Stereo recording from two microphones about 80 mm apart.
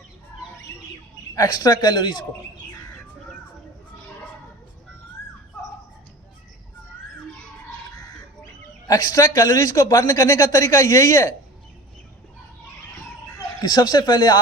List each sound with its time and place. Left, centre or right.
0.7 s bird: left
1.4 s a man's voice: left
8.9 s a man's voice: left
10.1 s speech: left
13.3 s speech: left